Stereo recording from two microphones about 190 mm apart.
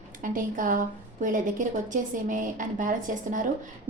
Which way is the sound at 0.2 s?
45° right (ahead or behind).